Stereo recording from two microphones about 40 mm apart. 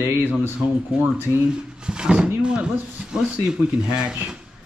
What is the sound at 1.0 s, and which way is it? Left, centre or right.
Speech, right.